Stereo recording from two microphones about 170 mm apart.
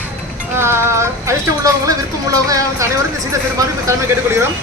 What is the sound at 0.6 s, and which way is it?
Speech, 15° right (ahead or behind).